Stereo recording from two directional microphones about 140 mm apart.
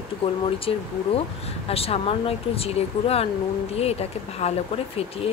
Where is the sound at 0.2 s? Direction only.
45° left (ahead or behind).